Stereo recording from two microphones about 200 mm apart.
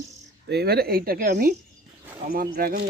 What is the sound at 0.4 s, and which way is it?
Speech, 55° right (ahead or behind).